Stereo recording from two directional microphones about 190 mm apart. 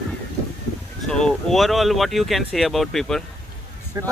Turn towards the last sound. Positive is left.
turn(degrees=-15)  # may be behind; listen again after turning